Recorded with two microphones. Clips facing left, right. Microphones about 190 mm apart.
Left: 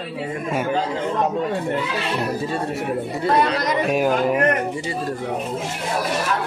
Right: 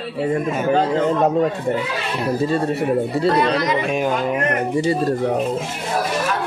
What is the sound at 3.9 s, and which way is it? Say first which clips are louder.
Speech: left 1 dB; 5° left (ahead or behind).